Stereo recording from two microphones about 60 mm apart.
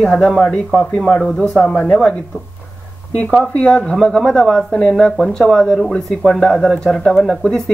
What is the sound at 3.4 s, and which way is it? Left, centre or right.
Speech, left.